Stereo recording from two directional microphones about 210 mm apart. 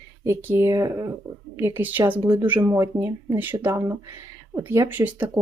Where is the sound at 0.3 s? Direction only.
10° right (ahead or behind).